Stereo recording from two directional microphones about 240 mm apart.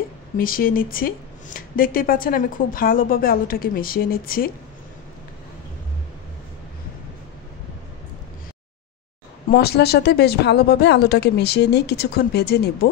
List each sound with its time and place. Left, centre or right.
0.4 s speech: left
9.5 s speech: left